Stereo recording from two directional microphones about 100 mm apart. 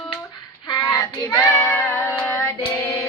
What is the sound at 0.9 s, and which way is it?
Child singing, 35° left (ahead or behind).